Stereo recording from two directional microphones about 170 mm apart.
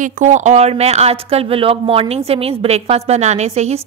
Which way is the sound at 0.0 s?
45° right (ahead or behind).